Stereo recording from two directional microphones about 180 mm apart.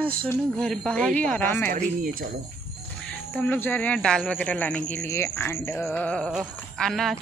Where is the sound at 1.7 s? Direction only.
50° right (ahead or behind).